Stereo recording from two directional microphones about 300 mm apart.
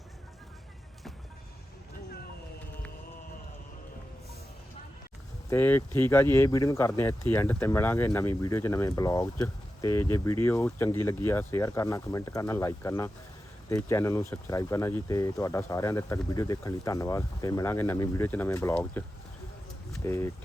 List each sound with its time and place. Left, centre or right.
5.5 s speech: centre
20.1 s speech: centre